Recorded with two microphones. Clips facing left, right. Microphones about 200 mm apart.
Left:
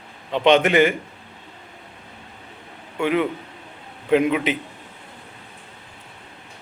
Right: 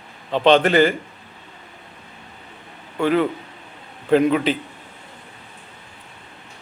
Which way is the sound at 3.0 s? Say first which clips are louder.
Right 2 dB; 35° right (ahead or behind).